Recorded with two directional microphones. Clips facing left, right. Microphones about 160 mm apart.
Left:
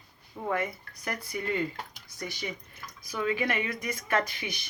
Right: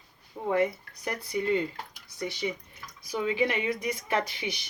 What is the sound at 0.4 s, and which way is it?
Speech, 25° right (ahead or behind).